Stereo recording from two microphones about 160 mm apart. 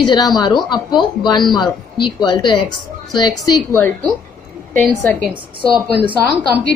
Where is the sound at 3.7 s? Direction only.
10° left (ahead or behind).